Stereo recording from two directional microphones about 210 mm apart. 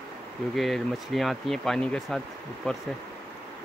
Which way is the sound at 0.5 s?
Centre (ahead or behind).